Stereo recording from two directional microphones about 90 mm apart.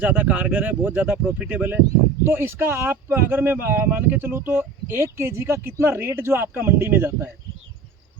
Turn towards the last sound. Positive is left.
turn(degrees=-25)  # may be behind; listen again after turning